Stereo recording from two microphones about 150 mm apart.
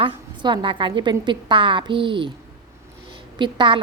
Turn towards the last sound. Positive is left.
turn(degrees=-30)  # may be behind; listen again after turning